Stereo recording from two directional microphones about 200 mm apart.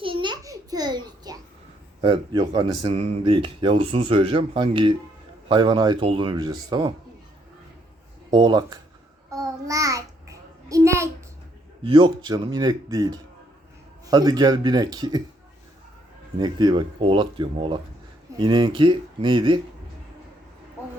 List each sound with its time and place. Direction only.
0.0 s a sound: 25° right (ahead or behind)
2.0 s speech: 25° right (ahead or behind)
8.3 s speech: 20° right (ahead or behind)
9.3 s babbling: 15° right (ahead or behind)
11.8 s speech: 25° right (ahead or behind)
16.4 s speech: 20° right (ahead or behind)